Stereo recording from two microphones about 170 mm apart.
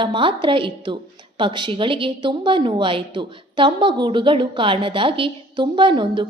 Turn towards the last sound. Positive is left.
turn(degrees=-30)  # may be behind; listen again after turning